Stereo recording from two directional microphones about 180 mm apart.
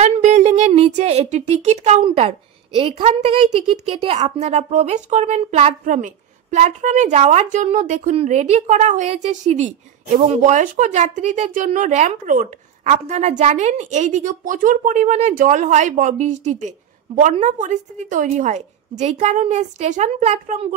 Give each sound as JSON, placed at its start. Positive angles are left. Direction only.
{"t": 0.0, "sound": "speech", "side_deg": -40}
{"t": 5.9, "sound": "a woman's voice", "side_deg": -45}